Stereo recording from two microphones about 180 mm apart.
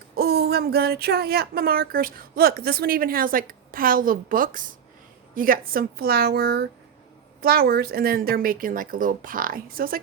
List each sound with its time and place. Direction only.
0.2 s speech: 60° right (ahead or behind)